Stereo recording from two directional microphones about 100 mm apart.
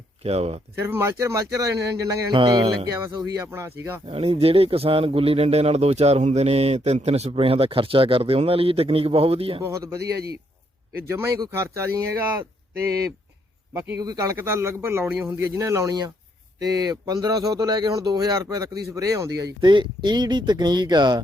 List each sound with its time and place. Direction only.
0.2 s speech: 90° right
0.8 s a man's voice: 25° right (ahead or behind)
2.3 s speech: 50° right (ahead or behind)
3.4 s a man's voice: 25° right (ahead or behind)
4.0 s speech: 85° right
9.6 s speech: 30° right (ahead or behind)
11.1 s a man's voice: 30° right (ahead or behind)
14.0 s speech: 35° right (ahead or behind)
14.3 s a man's voice: 25° right (ahead or behind)
19.7 s speech: 50° right (ahead or behind)